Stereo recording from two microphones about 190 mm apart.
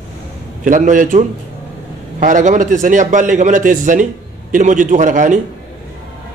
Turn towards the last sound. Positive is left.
turn(degrees=-40)  # may be behind; listen again after turning